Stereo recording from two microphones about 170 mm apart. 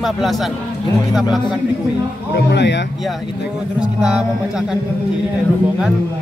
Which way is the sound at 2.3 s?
85° left.